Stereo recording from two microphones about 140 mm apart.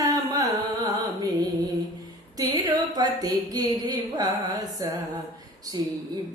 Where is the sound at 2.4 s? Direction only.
25° right (ahead or behind).